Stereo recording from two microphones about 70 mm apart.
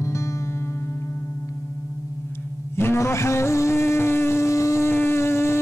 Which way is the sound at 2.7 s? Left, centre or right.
Left.